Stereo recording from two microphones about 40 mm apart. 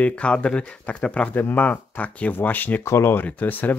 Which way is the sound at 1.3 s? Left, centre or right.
Left.